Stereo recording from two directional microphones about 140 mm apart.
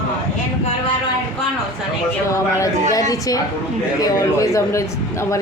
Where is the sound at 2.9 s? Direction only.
25° left (ahead or behind).